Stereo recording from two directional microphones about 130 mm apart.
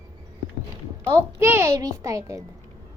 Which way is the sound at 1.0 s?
20° right (ahead or behind).